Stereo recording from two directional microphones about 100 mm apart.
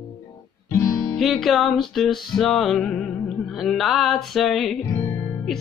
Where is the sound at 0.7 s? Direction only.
30° left (ahead or behind).